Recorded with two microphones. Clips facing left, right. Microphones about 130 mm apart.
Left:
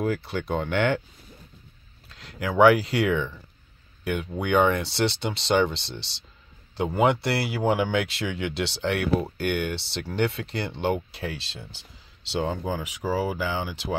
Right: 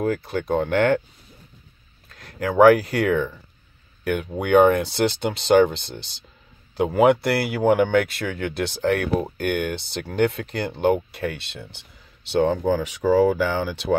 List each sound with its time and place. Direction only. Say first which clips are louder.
0.0 s speech: right 3 dB; 45° right (ahead or behind)
2.0 s speech: right 4 dB; 50° right (ahead or behind); by 13.9 s 75° right (ahead or behind)